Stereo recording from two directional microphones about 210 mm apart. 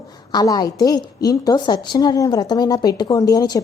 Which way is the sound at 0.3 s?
20° left (ahead or behind).